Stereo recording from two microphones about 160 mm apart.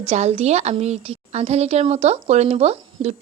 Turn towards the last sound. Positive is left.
turn(degrees=-40)  # may be behind; listen again after turning